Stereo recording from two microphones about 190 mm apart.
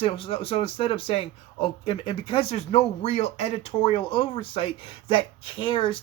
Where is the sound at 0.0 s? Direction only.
30° left (ahead or behind).